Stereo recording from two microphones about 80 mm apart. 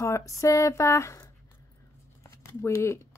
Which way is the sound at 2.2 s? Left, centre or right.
Left.